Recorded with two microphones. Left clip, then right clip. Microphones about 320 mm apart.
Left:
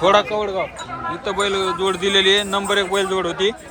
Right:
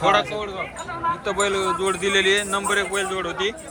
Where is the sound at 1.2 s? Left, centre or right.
Centre.